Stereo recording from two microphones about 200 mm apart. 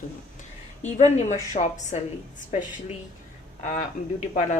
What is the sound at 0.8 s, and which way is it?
Speech, 35° left (ahead or behind).